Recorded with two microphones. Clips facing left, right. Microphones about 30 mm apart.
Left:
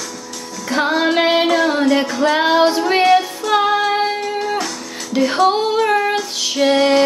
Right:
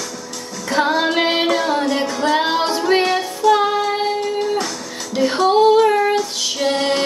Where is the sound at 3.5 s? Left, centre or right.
Centre.